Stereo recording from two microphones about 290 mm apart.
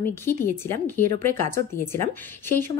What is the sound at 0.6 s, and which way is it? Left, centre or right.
A woman's voice, centre.